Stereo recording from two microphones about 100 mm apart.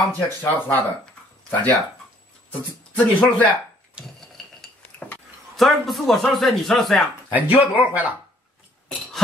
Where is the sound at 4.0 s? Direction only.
10° right (ahead or behind).